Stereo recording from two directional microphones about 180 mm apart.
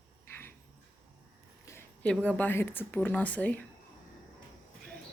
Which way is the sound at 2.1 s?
5° left (ahead or behind).